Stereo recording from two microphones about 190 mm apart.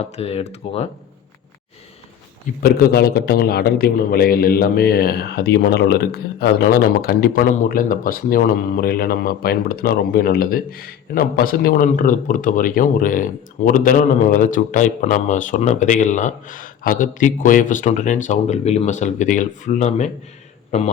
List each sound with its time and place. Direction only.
0.0 s speech: 30° left (ahead or behind)
2.6 s a man's voice: 55° left (ahead or behind); by 20.9 s 35° left (ahead or behind)